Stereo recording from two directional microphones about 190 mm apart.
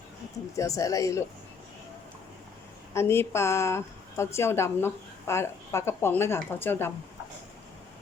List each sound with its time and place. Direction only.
0.5 s a woman's voice: 15° left (ahead or behind)
2.9 s a woman's voice: 15° left (ahead or behind)